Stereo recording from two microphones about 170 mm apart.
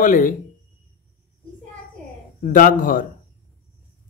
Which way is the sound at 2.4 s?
55° left (ahead or behind).